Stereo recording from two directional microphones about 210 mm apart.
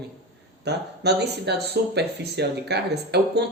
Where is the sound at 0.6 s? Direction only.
50° right (ahead or behind).